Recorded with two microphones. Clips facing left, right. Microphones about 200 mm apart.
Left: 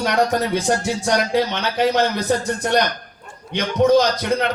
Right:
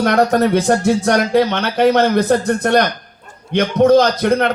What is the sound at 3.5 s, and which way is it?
Speech, 55° right (ahead or behind).